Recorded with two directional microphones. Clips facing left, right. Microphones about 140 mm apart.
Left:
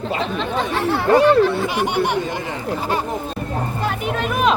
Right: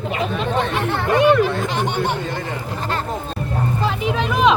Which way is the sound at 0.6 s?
5° left (ahead or behind).